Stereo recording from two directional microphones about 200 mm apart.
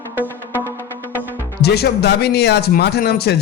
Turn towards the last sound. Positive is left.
turn(degrees=55)  # may be behind; listen again after turning